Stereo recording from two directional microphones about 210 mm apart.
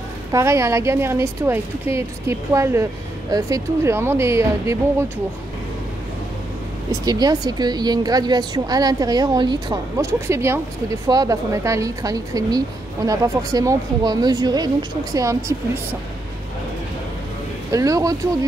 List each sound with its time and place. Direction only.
0.3 s a woman's voice: 15° right (ahead or behind)
7.1 s a woman's voice: 20° right (ahead or behind)
17.6 s a woman's voice: 15° right (ahead or behind)